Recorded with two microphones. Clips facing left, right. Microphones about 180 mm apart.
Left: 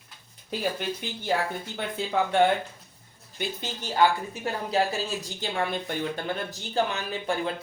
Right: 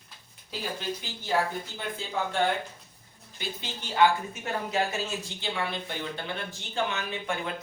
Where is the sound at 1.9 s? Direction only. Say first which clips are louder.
Left 7 dB; 65° left (ahead or behind).